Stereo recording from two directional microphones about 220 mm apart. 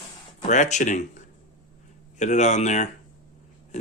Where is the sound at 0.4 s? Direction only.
35° left (ahead or behind).